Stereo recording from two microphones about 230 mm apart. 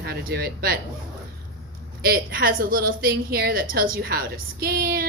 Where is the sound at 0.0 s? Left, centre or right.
Right.